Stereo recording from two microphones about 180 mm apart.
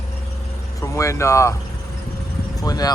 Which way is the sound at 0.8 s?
15° left (ahead or behind).